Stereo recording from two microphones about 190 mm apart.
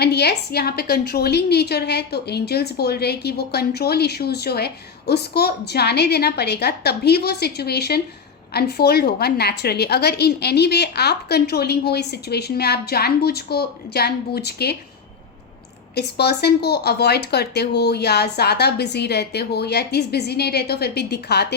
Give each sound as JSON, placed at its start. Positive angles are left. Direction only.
{"t": 0.0, "sound": "a woman's voice", "side_deg": 60}
{"t": 16.0, "sound": "a woman's voice", "side_deg": 60}